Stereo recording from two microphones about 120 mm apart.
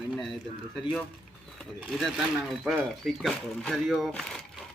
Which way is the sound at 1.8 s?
Centre (ahead or behind).